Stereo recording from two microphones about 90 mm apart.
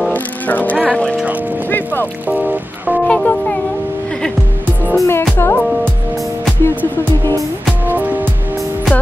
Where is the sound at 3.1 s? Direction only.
10° left (ahead or behind).